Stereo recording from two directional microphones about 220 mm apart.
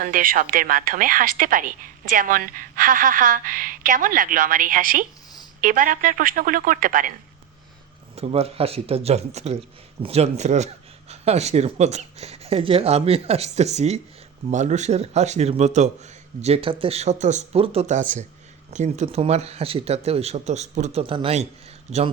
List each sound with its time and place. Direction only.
0.0 s a woman's voice: 40° right (ahead or behind)
8.1 s a woman's voice: 25° right (ahead or behind)